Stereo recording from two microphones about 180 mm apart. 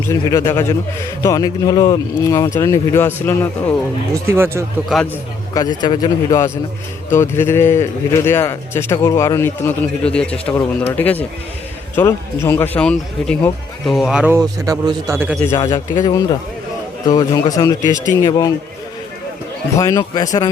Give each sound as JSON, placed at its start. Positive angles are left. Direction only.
{"t": 0.1, "sound": "speech", "side_deg": 20}
{"t": 4.1, "sound": "speech", "side_deg": -15}
{"t": 5.5, "sound": "speech", "side_deg": 25}
{"t": 14.3, "sound": "speech", "side_deg": -20}
{"t": 15.5, "sound": "speech", "side_deg": 20}
{"t": 19.7, "sound": "speech", "side_deg": 20}